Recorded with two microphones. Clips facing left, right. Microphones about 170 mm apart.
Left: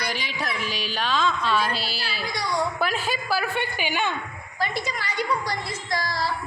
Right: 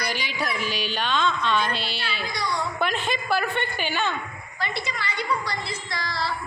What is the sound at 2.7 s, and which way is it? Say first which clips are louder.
A woman's voice: even; 5° left (ahead or behind).